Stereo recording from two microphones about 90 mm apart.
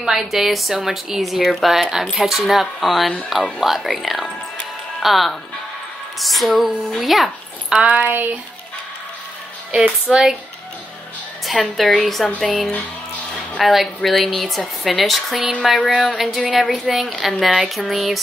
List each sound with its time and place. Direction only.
0.0 s speech: 5° right (ahead or behind)
7.7 s speech: 15° right (ahead or behind)
9.7 s speech: 15° right (ahead or behind)
11.4 s speech: 5° left (ahead or behind)
13.6 s speech: centre (ahead or behind)